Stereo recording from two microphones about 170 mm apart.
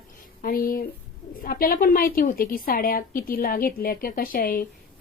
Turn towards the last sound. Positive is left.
turn(degrees=55)  # may be behind; listen again after turning